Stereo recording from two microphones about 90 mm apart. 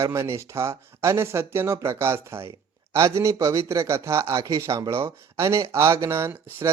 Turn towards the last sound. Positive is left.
turn(degrees=-30)  # may be behind; listen again after turning